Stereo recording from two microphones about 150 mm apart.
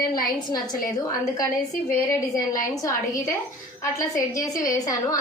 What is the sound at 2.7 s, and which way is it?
A woman's voice, 25° left (ahead or behind).